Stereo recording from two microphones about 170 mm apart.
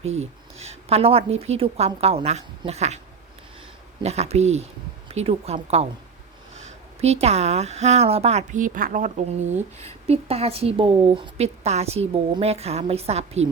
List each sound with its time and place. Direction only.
0.0 s a woman's voice: 40° right (ahead or behind)
4.0 s a woman's voice: 40° right (ahead or behind)
7.0 s a woman's voice: 40° right (ahead or behind)